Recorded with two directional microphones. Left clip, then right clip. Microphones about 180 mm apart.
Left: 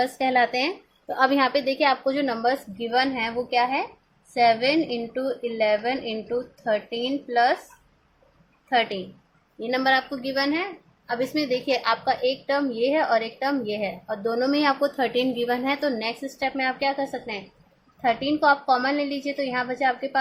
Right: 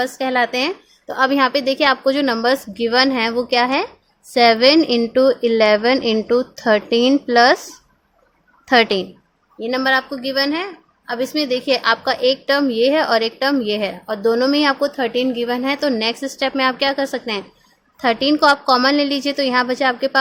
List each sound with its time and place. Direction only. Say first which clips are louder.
0.0 s a woman's voice: right 3 dB; 20° right (ahead or behind); by 7.6 s 65° right (ahead or behind)
8.7 s a woman's voice: right 9 dB; 65° right (ahead or behind)
9.6 s a woman's voice: right 4 dB; 30° right (ahead or behind); by 20.1 s 55° right (ahead or behind)